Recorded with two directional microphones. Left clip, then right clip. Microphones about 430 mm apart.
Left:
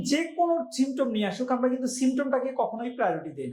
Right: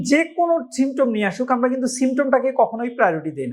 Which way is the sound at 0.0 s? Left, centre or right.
Right.